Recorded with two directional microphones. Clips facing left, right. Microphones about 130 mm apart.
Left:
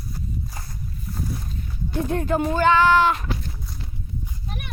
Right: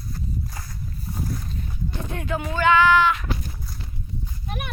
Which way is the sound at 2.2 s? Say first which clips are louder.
Left 3 dB; 40° left (ahead or behind).